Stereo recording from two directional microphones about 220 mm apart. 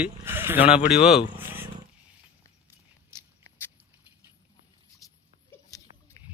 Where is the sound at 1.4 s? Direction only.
10° right (ahead or behind).